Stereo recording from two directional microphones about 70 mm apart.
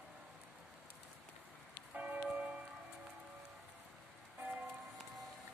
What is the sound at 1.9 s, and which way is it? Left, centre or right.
Church bell, right.